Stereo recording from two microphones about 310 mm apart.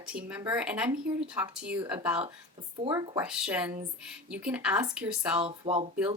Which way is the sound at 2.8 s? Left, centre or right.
Centre.